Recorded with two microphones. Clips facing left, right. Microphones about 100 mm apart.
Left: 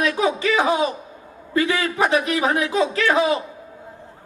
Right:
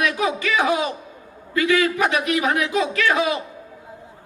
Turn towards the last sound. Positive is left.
turn(degrees=30)  # may be behind; listen again after turning